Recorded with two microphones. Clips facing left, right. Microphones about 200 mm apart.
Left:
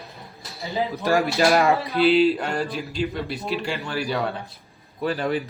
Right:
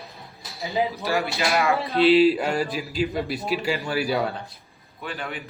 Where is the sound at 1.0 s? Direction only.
45° left (ahead or behind).